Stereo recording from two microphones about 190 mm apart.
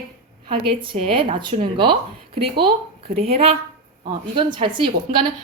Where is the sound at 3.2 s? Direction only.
30° right (ahead or behind).